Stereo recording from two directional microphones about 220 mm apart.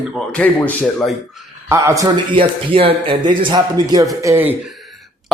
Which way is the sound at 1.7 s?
15° right (ahead or behind).